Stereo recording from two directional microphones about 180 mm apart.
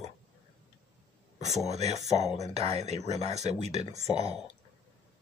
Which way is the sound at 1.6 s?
40° right (ahead or behind).